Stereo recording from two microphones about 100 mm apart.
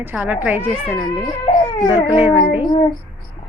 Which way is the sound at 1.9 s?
20° right (ahead or behind).